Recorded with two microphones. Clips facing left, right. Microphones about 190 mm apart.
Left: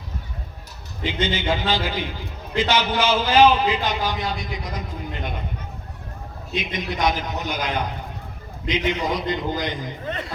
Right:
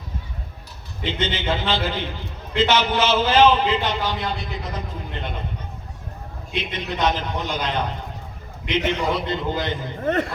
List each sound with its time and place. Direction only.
1.0 s a man's voice: 10° left (ahead or behind)
6.6 s a man's voice: 10° left (ahead or behind)
10.0 s speech: 50° right (ahead or behind)